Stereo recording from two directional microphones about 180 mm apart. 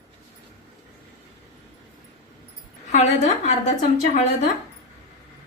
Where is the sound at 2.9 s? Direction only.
40° left (ahead or behind).